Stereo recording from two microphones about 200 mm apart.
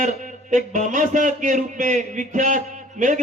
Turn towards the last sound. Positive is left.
turn(degrees=-40)  # may be behind; listen again after turning